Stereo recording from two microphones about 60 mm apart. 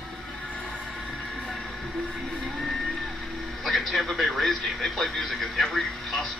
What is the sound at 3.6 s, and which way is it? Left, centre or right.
Speech, centre.